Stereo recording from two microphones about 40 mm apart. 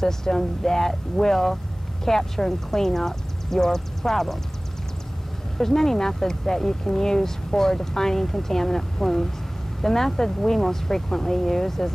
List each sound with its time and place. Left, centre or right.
0.0 s speech: centre
5.6 s speech: centre